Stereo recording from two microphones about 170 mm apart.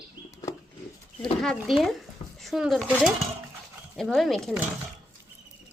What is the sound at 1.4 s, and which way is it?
Speech, centre (ahead or behind).